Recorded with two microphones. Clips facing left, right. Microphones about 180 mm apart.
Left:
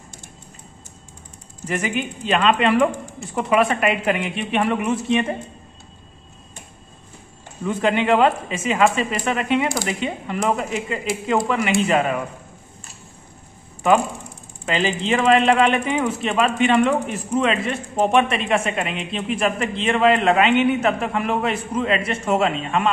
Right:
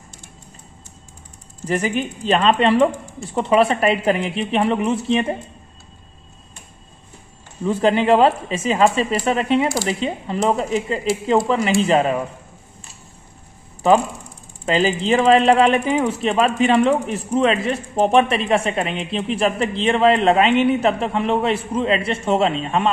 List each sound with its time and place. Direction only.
1.7 s speech: 35° right (ahead or behind)
7.6 s speech: 35° right (ahead or behind)
14.7 s speech: 35° right (ahead or behind)